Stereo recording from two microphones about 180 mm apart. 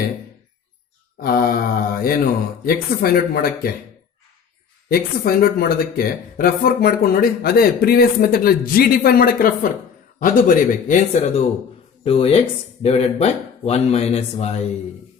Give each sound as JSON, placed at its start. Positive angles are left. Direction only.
{"t": 1.2, "sound": "speech", "side_deg": 55}
{"t": 4.9, "sound": "speech", "side_deg": 55}
{"t": 12.0, "sound": "speech", "side_deg": 30}